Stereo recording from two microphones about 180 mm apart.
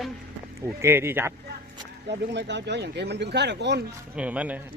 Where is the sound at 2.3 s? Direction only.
75° right (ahead or behind).